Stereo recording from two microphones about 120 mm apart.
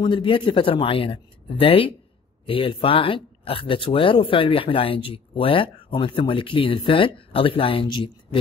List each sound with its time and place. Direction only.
0.0 s speech: 45° left (ahead or behind)